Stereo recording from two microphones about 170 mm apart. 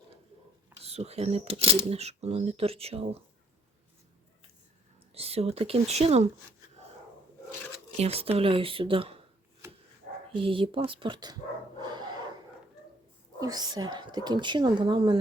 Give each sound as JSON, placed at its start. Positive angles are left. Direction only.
{"t": 0.8, "sound": "speech", "side_deg": -40}
{"t": 5.1, "sound": "speech", "side_deg": -35}
{"t": 7.9, "sound": "speech", "side_deg": -40}
{"t": 10.3, "sound": "speech", "side_deg": -30}
{"t": 11.8, "sound": "a sound", "side_deg": -25}
{"t": 13.4, "sound": "speech", "side_deg": -25}